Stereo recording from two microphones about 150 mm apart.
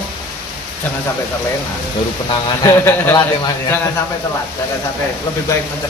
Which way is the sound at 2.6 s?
20° left (ahead or behind).